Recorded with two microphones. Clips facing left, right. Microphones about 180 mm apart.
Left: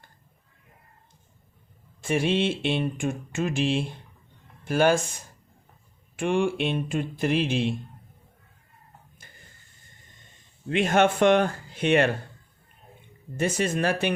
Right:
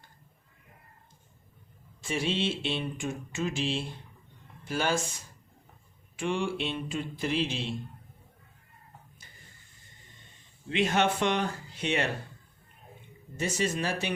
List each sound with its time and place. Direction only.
2.0 s speech: 55° left (ahead or behind)
10.7 s speech: 50° left (ahead or behind)
13.3 s speech: 55° left (ahead or behind)